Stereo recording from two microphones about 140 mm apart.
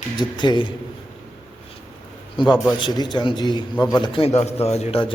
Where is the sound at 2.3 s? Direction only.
35° left (ahead or behind).